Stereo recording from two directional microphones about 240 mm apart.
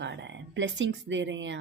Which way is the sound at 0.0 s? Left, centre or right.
Right.